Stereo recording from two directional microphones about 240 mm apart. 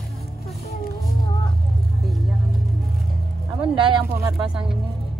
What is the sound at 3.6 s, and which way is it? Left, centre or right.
Speech, right.